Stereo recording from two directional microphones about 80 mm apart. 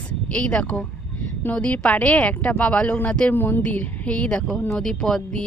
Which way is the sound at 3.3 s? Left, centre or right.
Left.